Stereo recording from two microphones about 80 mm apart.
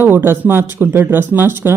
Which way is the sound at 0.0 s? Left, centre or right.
Right.